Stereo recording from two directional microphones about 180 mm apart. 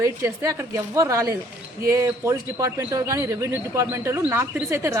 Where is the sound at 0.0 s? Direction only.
15° right (ahead or behind).